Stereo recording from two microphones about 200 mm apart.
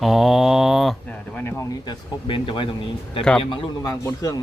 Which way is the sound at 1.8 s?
25° left (ahead or behind).